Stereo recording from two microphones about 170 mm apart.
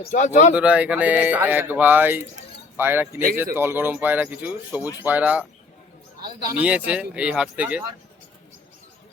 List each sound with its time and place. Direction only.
0.0 s speech: 45° left (ahead or behind)
0.5 s speech: 5° right (ahead or behind)
6.6 s speech: 5° right (ahead or behind)